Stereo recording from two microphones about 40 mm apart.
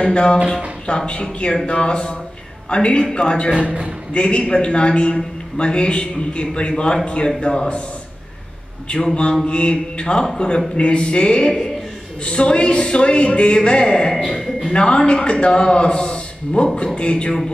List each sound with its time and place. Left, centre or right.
0.0 s a man's voice: left
3.5 s a man's voice: right
4.1 s a man's voice: left
8.8 s a man's voice: left
10.2 s speech: centre
10.8 s a man's voice: left
14.1 s a man's voice: centre
14.6 s a man's voice: left